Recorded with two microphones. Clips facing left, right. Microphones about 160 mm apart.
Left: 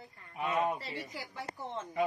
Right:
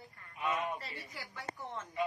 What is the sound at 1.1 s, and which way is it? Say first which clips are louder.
Speech: left 3 dB; 25° left (ahead or behind).